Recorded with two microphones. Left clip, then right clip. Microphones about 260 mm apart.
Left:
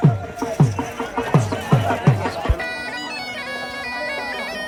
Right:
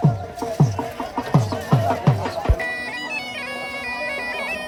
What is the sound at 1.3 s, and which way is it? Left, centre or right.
Music, left.